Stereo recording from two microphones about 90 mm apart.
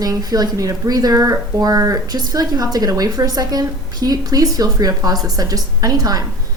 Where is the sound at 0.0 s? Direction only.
45° right (ahead or behind).